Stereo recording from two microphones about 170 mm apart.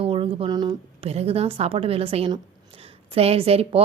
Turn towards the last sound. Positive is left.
turn(degrees=-35)  # may be behind; listen again after turning